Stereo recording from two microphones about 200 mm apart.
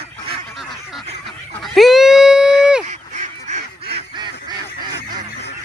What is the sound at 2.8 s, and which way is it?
Goose, 35° right (ahead or behind).